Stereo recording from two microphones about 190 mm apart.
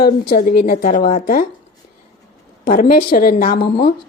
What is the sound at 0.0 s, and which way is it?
Speech, 50° left (ahead or behind).